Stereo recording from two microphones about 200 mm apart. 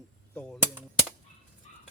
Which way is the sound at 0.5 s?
10° right (ahead or behind).